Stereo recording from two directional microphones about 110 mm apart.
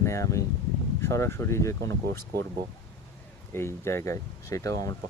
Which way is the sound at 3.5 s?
25° left (ahead or behind).